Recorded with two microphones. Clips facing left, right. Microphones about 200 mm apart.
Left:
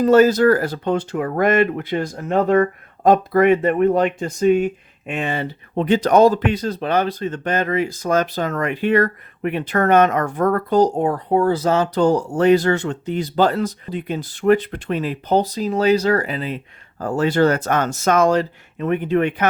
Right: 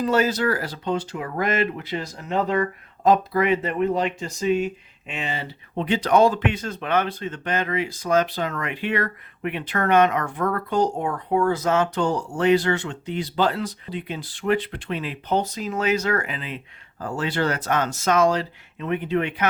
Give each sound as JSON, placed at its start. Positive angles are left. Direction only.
{"t": 0.0, "sound": "speech", "side_deg": 45}